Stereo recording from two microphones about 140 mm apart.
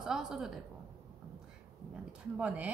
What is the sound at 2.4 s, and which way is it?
Speech, 10° right (ahead or behind).